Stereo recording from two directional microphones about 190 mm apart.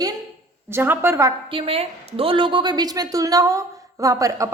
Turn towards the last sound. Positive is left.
turn(degrees=-15)  # may be behind; listen again after turning